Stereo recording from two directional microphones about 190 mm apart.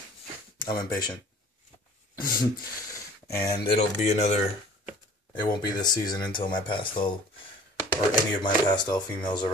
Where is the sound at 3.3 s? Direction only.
20° left (ahead or behind).